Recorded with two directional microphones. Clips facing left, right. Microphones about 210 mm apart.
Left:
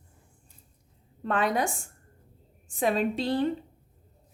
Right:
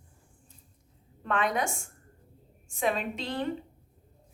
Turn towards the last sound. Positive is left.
turn(degrees=35)  # may be behind; listen again after turning